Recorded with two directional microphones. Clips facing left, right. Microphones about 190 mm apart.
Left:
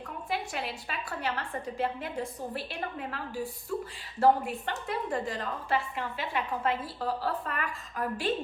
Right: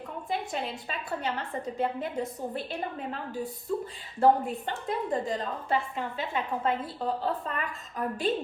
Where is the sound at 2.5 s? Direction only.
20° right (ahead or behind).